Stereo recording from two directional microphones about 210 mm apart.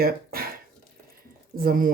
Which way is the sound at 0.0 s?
45° right (ahead or behind).